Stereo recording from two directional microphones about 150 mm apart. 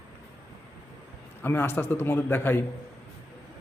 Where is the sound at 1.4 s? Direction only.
15° left (ahead or behind).